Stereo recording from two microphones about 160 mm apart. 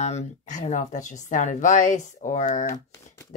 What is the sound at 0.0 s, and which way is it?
Speech, 45° left (ahead or behind).